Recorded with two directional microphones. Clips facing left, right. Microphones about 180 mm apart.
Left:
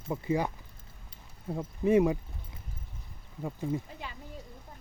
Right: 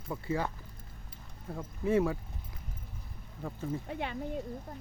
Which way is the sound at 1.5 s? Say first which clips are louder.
Left 4 dB; 15° left (ahead or behind).